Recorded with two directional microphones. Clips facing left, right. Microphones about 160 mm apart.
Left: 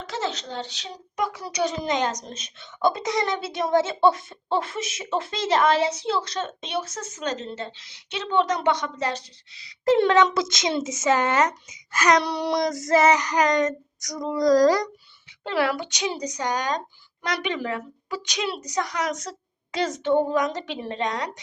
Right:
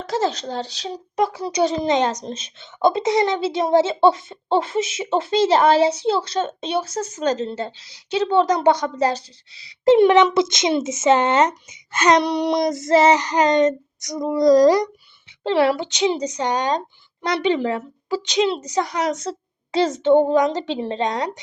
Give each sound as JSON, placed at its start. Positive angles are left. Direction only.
{"t": 0.0, "sound": "a woman's voice", "side_deg": -40}